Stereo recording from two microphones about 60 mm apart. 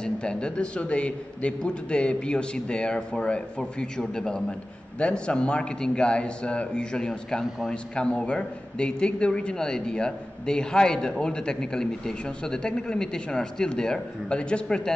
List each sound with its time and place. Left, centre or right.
0.0 s a man's voice: centre